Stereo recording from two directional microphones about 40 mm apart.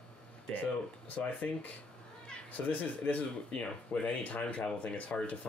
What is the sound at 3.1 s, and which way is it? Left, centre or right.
Speech, left.